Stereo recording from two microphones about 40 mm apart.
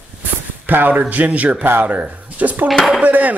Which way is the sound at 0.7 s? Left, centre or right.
Right.